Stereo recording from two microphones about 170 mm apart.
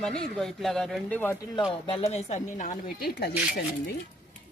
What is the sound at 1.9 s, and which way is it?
Speech, 35° left (ahead or behind).